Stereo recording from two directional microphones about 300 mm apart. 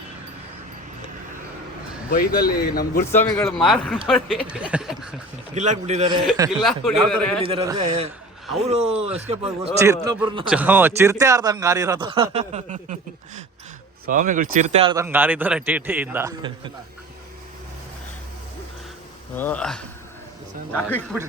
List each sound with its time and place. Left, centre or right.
2.0 s a man's voice: left
3.0 s speech: centre
5.5 s speech: right
6.6 s speech: centre
7.4 s speech: centre
9.7 s speech: centre
14.1 s speech: right; by 16.5 s centre
19.4 s speech: centre